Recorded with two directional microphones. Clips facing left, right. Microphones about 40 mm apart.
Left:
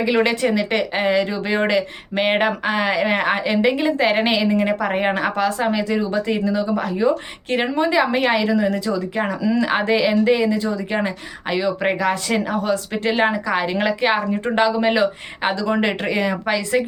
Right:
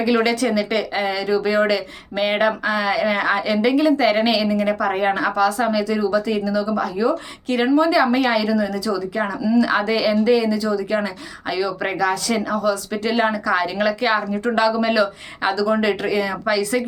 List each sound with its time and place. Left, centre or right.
0.0 s a woman's voice: left